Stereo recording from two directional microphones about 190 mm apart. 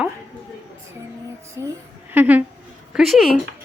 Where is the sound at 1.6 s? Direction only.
20° right (ahead or behind); by 3.4 s centre (ahead or behind).